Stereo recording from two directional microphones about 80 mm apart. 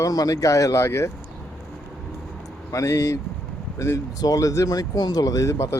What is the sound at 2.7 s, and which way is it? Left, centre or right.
Speech, left.